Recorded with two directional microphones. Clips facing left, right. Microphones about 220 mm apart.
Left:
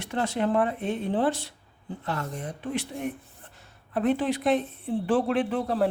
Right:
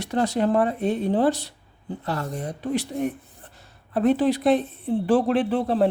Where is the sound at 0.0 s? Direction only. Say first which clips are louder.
Right 5 dB; 40° right (ahead or behind).